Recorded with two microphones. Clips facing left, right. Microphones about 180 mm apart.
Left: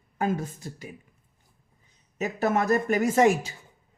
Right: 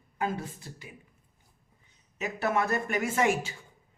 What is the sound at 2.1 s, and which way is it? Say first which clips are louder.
A man's voice: left 4 dB; 40° left (ahead or behind).